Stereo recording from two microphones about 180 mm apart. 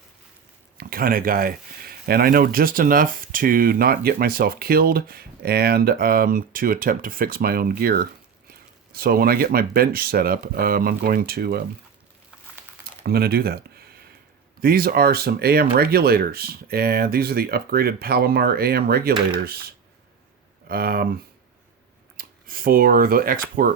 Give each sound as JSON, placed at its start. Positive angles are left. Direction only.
{"t": 0.8, "sound": "speech", "side_deg": -55}
{"t": 13.0, "sound": "speech", "side_deg": -60}
{"t": 22.2, "sound": "speech", "side_deg": -55}